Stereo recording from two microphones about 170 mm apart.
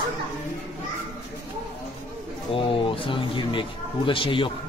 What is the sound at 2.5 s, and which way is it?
Speech, 30° left (ahead or behind).